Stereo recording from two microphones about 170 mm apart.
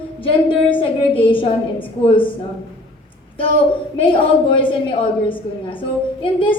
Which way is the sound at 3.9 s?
30° left (ahead or behind).